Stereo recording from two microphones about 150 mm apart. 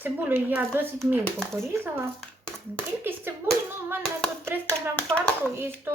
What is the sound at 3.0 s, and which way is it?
Hands, 15° right (ahead or behind).